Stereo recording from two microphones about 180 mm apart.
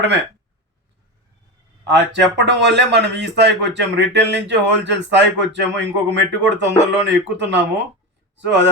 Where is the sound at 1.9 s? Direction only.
75° right (ahead or behind).